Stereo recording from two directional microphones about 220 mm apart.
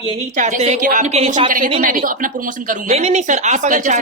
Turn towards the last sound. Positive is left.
turn(degrees=-35)  # may be behind; listen again after turning